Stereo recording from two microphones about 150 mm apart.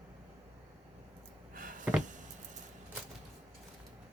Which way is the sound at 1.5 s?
65° right (ahead or behind).